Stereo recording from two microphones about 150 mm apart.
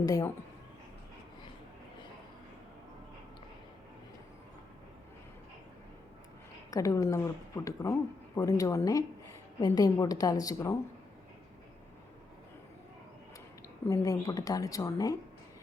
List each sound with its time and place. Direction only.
0.0 s a woman's voice: 25° left (ahead or behind)
6.7 s a woman's voice: 20° left (ahead or behind)
13.8 s a woman's voice: 25° left (ahead or behind)